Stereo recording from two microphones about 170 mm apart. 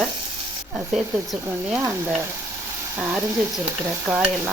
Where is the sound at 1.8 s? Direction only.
15° right (ahead or behind).